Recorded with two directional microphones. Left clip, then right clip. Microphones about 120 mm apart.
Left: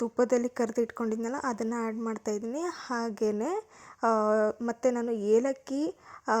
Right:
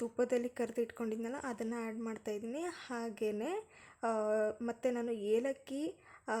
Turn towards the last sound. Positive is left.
turn(degrees=40)  # may be behind; listen again after turning